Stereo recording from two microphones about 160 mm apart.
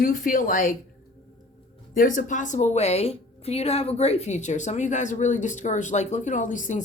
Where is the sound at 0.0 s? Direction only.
60° left (ahead or behind).